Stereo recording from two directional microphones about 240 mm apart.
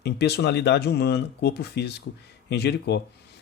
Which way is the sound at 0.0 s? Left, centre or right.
Left.